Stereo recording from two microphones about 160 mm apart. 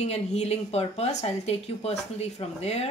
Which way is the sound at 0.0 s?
45° left (ahead or behind).